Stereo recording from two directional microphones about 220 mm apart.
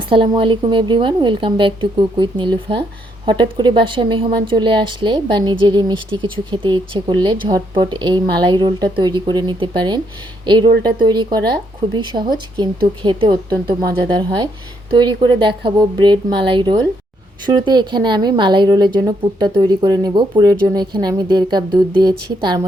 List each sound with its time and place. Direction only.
0.1 s a woman's voice: 25° right (ahead or behind)